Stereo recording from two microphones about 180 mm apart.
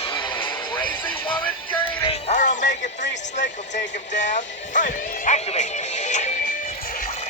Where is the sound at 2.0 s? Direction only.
30° left (ahead or behind).